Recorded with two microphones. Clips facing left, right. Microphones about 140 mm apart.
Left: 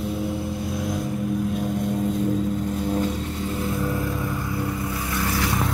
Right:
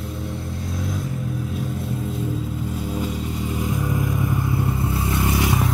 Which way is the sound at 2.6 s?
10° right (ahead or behind).